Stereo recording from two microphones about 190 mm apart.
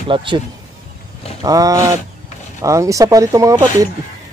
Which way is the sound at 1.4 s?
20° right (ahead or behind).